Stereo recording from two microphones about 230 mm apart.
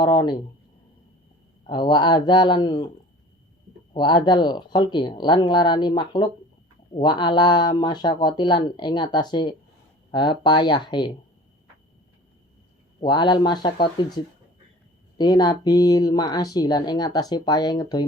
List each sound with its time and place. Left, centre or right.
0.0 s speech: centre
1.6 s speech: left
3.9 s speech: centre
13.0 s speech: centre
15.2 s speech: centre